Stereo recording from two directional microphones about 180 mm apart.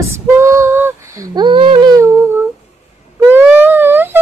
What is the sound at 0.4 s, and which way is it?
Humming, 15° right (ahead or behind).